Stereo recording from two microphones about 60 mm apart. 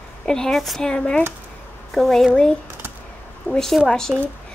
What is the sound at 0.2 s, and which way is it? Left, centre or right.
Speech, centre.